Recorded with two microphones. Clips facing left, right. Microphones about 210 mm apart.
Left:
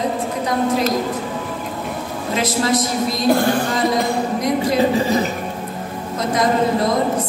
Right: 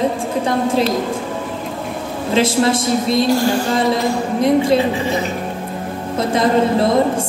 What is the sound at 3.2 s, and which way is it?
Music, 55° left (ahead or behind).